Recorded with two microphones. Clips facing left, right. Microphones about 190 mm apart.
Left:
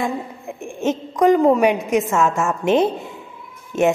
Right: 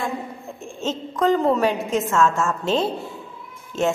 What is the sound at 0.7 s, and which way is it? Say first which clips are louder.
A woman's voice: left 5 dB; 15° left (ahead or behind).